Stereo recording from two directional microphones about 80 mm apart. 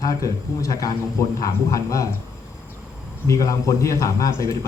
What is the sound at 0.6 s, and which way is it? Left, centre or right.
A man's voice, left.